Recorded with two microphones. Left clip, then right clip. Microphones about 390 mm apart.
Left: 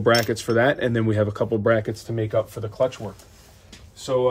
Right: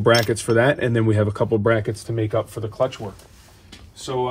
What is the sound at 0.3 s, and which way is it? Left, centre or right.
Speech, centre.